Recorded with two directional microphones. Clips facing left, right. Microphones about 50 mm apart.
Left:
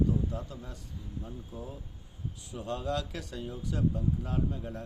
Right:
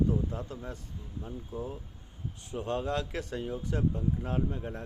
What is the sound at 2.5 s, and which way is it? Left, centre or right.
Speech, right.